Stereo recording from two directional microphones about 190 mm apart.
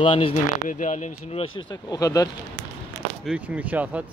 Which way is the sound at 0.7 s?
40° left (ahead or behind).